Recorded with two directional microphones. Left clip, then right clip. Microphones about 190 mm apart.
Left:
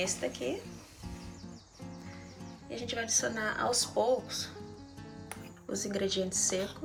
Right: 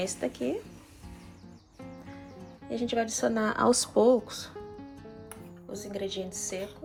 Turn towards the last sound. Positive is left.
turn(degrees=5)  # may be behind; listen again after turning